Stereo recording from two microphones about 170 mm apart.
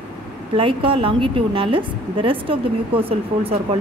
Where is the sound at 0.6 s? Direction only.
30° right (ahead or behind).